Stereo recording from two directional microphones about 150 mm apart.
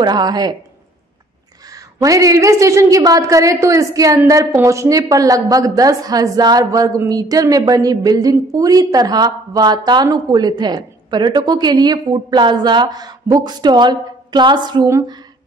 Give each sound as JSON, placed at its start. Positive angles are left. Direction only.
{"t": 0.0, "sound": "a woman's voice", "side_deg": -25}
{"t": 2.0, "sound": "a woman's voice", "side_deg": -20}